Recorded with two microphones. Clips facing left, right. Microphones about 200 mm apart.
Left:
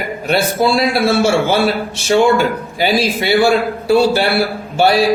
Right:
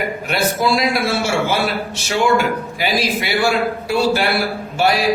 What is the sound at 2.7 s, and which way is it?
A man's voice, 30° left (ahead or behind).